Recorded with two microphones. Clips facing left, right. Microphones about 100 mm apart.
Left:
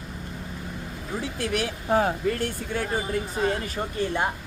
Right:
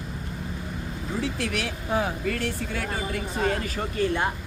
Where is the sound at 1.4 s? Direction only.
40° left (ahead or behind).